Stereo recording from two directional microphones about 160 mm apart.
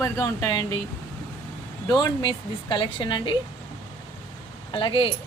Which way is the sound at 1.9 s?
25° left (ahead or behind).